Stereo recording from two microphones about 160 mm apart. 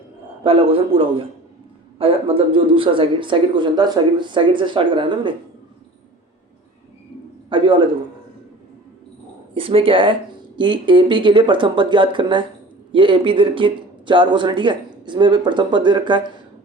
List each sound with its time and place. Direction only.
0.4 s speech: 35° right (ahead or behind)
7.5 s a sound: 30° right (ahead or behind)
9.6 s speech: 35° right (ahead or behind)